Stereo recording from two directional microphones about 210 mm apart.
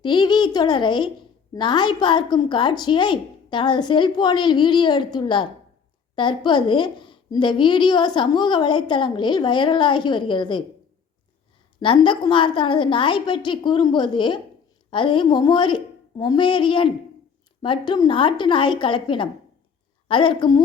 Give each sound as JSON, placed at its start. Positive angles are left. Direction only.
{"t": 0.0, "sound": "a woman's voice", "side_deg": 20}
{"t": 11.8, "sound": "a woman's voice", "side_deg": 25}